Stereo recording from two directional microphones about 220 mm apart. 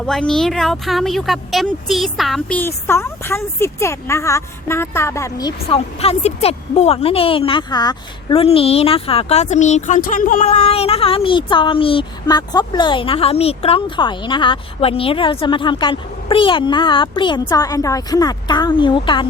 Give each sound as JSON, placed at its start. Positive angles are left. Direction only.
{"t": 0.0, "sound": "a woman's voice", "side_deg": 0}